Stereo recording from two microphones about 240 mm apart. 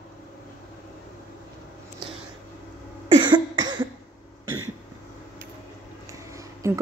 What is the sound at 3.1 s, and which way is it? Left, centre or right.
Cough, centre.